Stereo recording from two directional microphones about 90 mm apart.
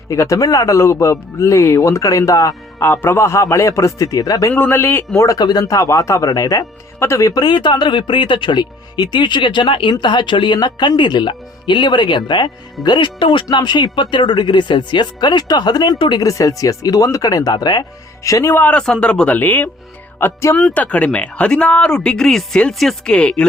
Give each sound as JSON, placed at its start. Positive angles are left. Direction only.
{"t": 0.1, "sound": "speech", "side_deg": 35}
{"t": 2.7, "sound": "speech", "side_deg": 25}
{"t": 4.5, "sound": "a man's voice", "side_deg": 25}
{"t": 5.2, "sound": "speech", "side_deg": 45}
{"t": 7.4, "sound": "speech", "side_deg": 55}
{"t": 9.9, "sound": "speech", "side_deg": 55}
{"t": 13.5, "sound": "speech", "side_deg": 55}
{"t": 16.2, "sound": "speech", "side_deg": 40}
{"t": 18.2, "sound": "speech", "side_deg": 35}
{"t": 18.5, "sound": "a man's voice", "side_deg": 20}
{"t": 20.7, "sound": "speech", "side_deg": 15}